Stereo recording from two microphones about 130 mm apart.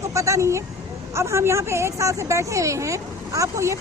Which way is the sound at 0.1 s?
25° right (ahead or behind).